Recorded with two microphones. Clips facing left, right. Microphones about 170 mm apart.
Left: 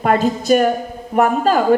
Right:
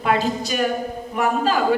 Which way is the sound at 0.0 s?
50° left (ahead or behind).